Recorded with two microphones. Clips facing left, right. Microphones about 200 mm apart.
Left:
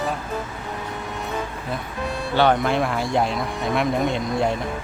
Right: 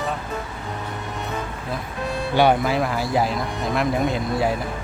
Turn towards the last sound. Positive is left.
turn(degrees=-5)  # may be behind; listen again after turning